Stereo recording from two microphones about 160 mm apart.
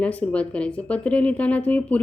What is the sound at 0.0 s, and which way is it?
Speech, 10° left (ahead or behind).